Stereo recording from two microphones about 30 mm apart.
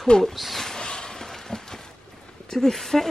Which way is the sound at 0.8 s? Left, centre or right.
Left.